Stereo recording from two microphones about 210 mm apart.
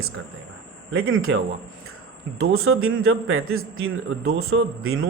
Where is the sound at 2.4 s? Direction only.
80° right.